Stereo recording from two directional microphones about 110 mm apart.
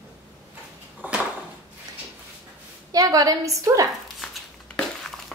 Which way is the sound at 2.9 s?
35° right (ahead or behind).